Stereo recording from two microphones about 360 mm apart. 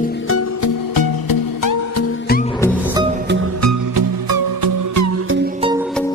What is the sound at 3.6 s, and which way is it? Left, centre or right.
Music, right.